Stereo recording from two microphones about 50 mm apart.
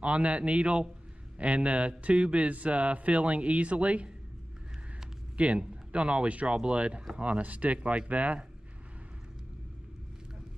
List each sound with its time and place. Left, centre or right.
0.0 s speech: right
5.4 s speech: right